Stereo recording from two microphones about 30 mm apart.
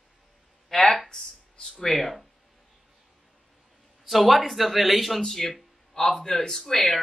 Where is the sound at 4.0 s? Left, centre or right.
Centre.